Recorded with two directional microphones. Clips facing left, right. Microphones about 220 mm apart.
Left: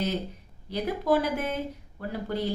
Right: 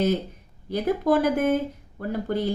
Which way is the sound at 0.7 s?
50° right (ahead or behind).